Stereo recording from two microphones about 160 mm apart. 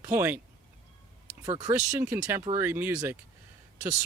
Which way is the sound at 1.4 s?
25° right (ahead or behind).